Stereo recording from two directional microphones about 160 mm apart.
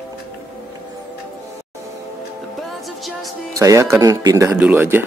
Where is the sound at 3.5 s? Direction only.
20° right (ahead or behind).